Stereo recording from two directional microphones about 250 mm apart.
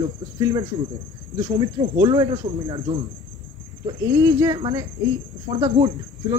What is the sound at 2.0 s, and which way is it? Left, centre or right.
Cricket, centre.